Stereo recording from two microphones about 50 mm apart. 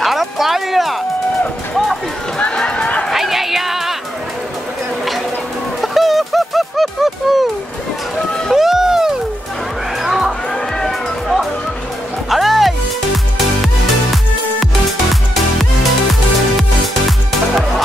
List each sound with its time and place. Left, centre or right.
0.0 s music: centre
2.3 s run: centre
3.1 s music: centre
5.8 s a sound: centre
8.5 s a sound: centre
10.0 s music: centre
10.8 s music: centre